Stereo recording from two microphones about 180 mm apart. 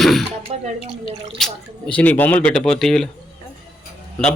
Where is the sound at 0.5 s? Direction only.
35° right (ahead or behind).